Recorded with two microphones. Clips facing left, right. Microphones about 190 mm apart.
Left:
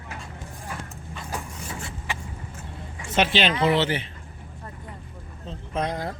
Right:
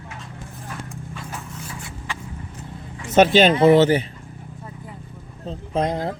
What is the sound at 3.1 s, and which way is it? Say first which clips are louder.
Speech: right 8 dB; 45° right (ahead or behind).